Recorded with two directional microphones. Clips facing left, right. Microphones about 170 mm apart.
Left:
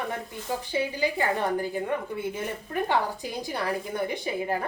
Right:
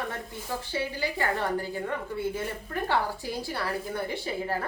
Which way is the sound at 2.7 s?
15° left (ahead or behind).